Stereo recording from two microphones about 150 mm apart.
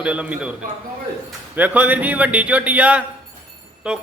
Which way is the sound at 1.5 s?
10° right (ahead or behind).